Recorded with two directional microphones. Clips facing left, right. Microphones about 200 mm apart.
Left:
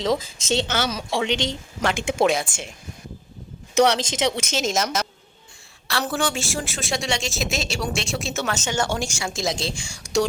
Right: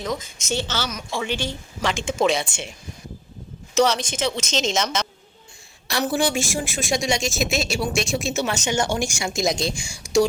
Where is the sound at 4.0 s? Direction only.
25° left (ahead or behind).